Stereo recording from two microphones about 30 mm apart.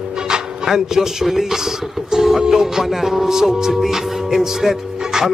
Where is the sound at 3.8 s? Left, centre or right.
Centre.